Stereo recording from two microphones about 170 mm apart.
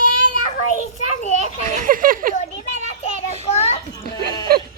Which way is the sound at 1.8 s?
55° right (ahead or behind).